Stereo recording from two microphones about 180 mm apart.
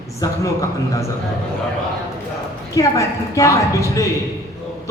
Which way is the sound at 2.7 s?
15° left (ahead or behind).